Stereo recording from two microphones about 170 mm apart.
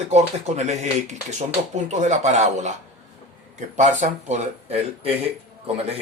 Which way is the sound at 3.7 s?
45° right (ahead or behind).